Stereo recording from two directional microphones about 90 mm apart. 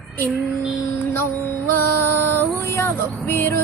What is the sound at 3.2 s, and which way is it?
Music, 25° left (ahead or behind).